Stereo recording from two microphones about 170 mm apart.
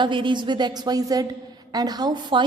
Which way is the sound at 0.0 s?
30° right (ahead or behind).